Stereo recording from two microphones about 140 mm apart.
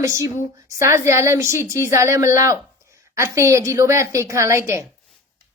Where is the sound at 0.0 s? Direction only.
20° right (ahead or behind).